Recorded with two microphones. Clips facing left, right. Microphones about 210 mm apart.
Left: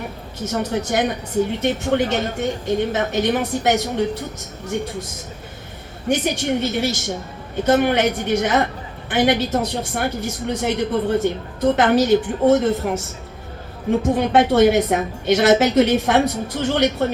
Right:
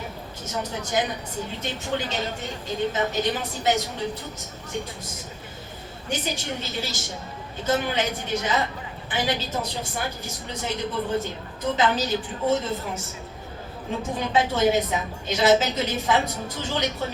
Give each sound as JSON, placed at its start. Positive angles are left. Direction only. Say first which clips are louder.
{"t": 0.4, "sound": "a woman's voice", "louder": "left 9 dB", "side_deg": 70}
{"t": 6.1, "sound": "a woman's voice", "louder": "left 10 dB", "side_deg": 65}
{"t": 14.1, "sound": "a woman's voice", "louder": "left 7 dB", "side_deg": 65}